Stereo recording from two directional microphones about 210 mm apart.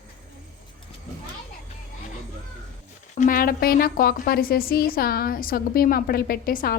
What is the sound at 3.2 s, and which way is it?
A woman's voice, 40° left (ahead or behind).